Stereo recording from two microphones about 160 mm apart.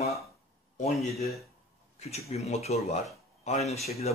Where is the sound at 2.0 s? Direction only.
40° left (ahead or behind).